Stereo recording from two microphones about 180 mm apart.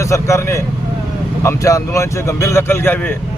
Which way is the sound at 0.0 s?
15° left (ahead or behind).